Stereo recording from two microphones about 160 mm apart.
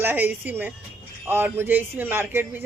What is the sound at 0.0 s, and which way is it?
A woman's voice, 10° right (ahead or behind).